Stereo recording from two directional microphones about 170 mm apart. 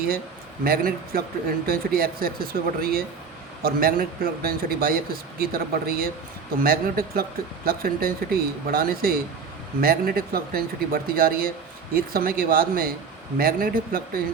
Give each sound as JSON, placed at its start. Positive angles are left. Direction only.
{"t": 0.6, "sound": "speech", "side_deg": -60}